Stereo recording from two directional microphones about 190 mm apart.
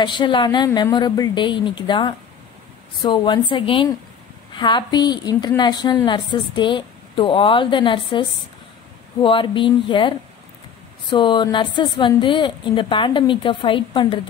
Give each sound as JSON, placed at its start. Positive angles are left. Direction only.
{"t": 0.0, "sound": "a woman's voice", "side_deg": 25}